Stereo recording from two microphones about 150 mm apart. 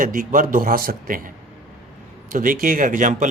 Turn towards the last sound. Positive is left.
turn(degrees=-60)  # may be behind; listen again after turning